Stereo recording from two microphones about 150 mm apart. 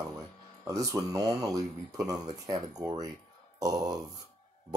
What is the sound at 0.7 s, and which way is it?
Speech, 20° right (ahead or behind).